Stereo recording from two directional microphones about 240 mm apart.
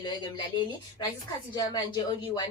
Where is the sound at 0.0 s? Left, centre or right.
Centre.